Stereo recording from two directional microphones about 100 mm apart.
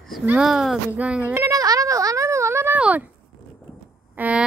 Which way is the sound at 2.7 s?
15° right (ahead or behind).